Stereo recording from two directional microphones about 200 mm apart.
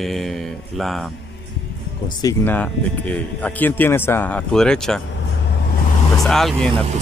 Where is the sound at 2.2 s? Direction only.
10° left (ahead or behind).